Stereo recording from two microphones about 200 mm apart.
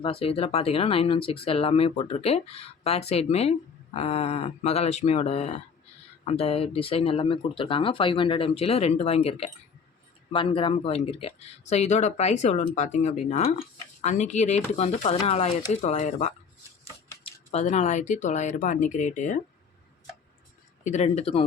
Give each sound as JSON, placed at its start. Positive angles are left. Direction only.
{"t": 0.0, "sound": "speech", "side_deg": 30}
{"t": 20.8, "sound": "speech", "side_deg": 35}